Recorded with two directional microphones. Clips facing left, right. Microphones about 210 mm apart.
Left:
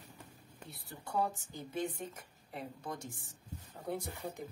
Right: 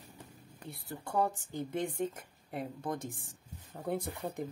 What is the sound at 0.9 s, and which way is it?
Speech, 50° right (ahead or behind).